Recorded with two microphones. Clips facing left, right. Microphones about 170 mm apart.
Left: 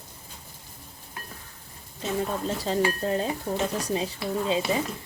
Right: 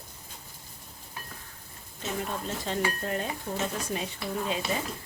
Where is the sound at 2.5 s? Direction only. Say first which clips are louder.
Left 5 dB; 35° left (ahead or behind).